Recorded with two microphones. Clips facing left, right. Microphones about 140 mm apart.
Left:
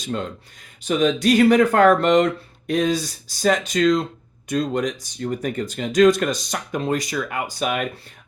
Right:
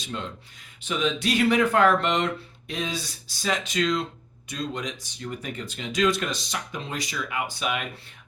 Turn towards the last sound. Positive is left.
turn(degrees=45)  # may be behind; listen again after turning